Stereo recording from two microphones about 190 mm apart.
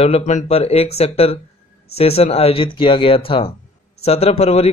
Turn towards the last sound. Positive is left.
turn(degrees=35)  # may be behind; listen again after turning